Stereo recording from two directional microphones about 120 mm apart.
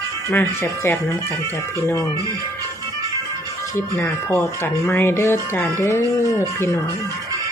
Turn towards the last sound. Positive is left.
turn(degrees=20)  # may be behind; listen again after turning